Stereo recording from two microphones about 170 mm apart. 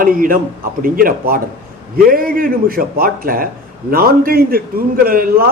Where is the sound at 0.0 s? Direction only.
55° right (ahead or behind).